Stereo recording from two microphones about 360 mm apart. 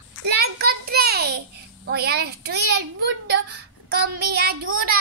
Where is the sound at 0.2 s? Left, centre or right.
Right.